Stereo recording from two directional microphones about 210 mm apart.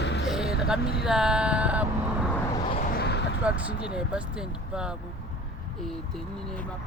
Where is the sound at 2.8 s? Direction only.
50° left (ahead or behind).